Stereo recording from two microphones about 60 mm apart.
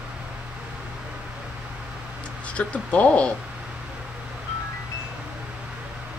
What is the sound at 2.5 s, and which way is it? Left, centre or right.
Speech, left.